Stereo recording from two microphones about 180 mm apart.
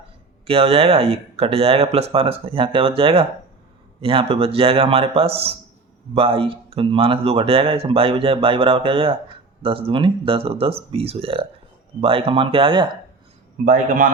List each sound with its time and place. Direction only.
0.4 s speech: 35° right (ahead or behind)
13.7 s a man's voice: 50° right (ahead or behind)